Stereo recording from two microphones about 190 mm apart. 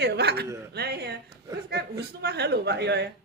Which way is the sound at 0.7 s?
60° right (ahead or behind).